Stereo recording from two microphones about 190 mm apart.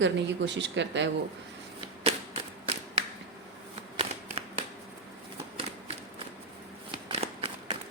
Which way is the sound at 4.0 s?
30° right (ahead or behind).